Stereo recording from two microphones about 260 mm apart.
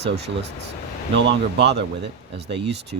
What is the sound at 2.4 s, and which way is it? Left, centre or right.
Speech, right.